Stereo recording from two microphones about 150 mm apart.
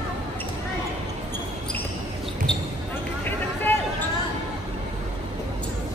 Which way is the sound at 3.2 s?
10° left (ahead or behind).